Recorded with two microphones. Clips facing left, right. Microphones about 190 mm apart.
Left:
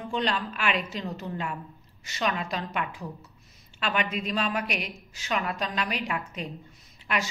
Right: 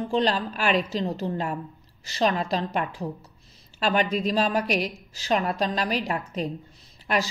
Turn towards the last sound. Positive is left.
turn(degrees=-35)  # may be behind; listen again after turning